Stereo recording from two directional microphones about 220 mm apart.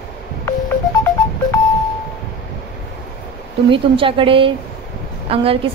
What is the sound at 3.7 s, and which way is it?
A woman's voice, 25° right (ahead or behind).